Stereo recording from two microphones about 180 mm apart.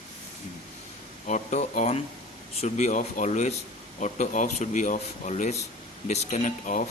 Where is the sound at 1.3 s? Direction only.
40° left (ahead or behind).